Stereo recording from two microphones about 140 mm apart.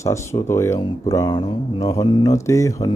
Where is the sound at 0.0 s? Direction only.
20° left (ahead or behind).